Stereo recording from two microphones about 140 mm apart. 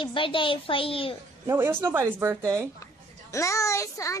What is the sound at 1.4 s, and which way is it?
Speech, 15° right (ahead or behind).